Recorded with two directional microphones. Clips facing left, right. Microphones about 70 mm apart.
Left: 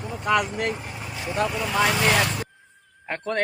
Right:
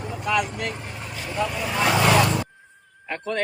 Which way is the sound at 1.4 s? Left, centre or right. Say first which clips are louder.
Left 1 dB; centre.